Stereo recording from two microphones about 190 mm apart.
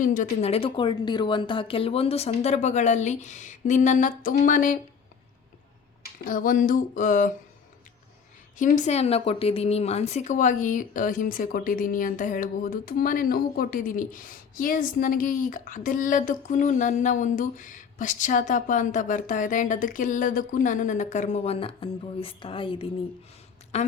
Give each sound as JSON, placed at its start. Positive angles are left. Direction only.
{"t": 0.0, "sound": "a woman's voice", "side_deg": 45}
{"t": 6.2, "sound": "a woman's voice", "side_deg": 45}
{"t": 8.5, "sound": "a woman's voice", "side_deg": 40}